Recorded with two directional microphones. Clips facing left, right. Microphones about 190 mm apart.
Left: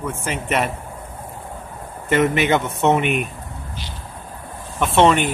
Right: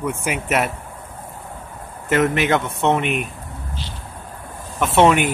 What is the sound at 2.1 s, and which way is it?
Speech, centre (ahead or behind).